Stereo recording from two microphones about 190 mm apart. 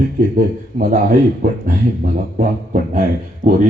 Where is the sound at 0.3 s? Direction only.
50° right (ahead or behind).